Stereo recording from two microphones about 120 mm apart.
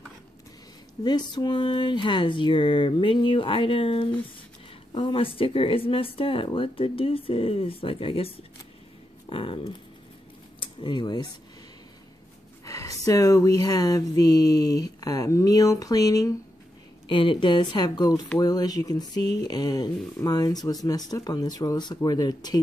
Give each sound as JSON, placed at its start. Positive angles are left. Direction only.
{"t": 1.0, "sound": "speech", "side_deg": 35}
{"t": 12.6, "sound": "speech", "side_deg": 30}
{"t": 17.1, "sound": "speech", "side_deg": 45}